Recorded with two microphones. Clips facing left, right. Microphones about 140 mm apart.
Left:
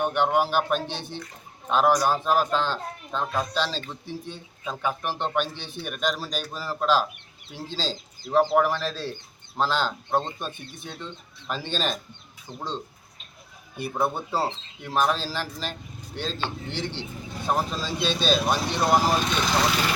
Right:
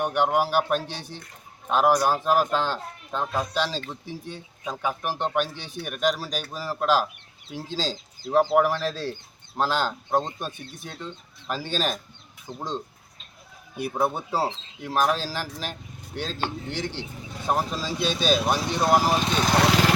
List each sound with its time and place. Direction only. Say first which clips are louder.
0.0 s speech: even; 10° right (ahead or behind)
19.6 s vehicle: right 4 dB; 90° right